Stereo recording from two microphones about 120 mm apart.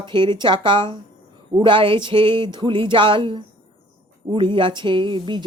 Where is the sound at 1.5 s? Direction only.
45° right (ahead or behind).